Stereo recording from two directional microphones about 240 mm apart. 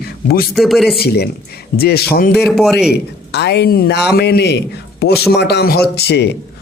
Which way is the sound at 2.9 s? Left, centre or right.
Left.